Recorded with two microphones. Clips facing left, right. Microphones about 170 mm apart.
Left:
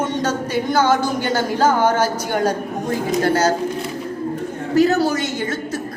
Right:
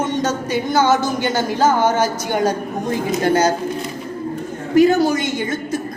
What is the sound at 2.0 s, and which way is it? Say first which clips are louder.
A woman's voice: right 1 dB; 10° right (ahead or behind).